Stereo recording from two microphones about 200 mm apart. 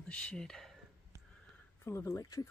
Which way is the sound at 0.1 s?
5° left (ahead or behind).